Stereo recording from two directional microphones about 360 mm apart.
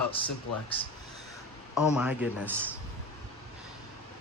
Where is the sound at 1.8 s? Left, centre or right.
Centre.